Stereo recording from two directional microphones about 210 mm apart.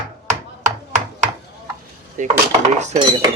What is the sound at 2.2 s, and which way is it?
Speech, 35° right (ahead or behind).